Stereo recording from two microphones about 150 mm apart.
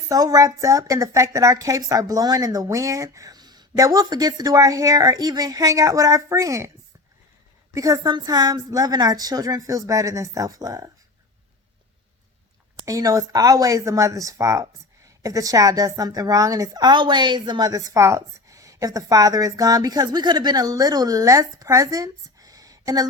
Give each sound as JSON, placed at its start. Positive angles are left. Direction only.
{"t": 0.1, "sound": "speech", "side_deg": -25}
{"t": 7.7, "sound": "speech", "side_deg": -20}
{"t": 12.8, "sound": "speech", "side_deg": -20}